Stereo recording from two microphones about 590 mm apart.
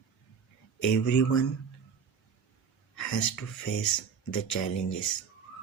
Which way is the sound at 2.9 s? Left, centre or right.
Left.